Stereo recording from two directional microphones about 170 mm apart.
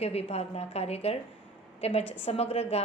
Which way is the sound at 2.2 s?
35° left (ahead or behind).